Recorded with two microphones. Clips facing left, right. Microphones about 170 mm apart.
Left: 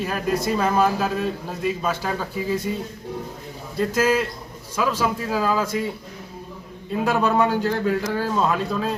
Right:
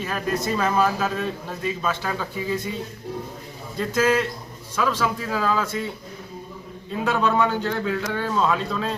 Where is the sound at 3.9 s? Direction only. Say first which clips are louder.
Right 1 dB; 10° left (ahead or behind).